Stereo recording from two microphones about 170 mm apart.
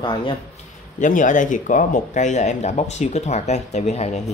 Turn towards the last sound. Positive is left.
turn(degrees=40)  # may be behind; listen again after turning